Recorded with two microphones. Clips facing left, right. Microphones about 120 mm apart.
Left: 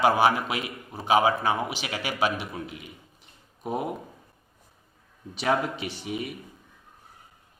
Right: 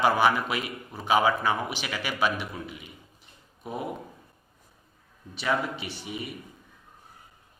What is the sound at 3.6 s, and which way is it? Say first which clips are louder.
Speech: left 5 dB; 50° left (ahead or behind).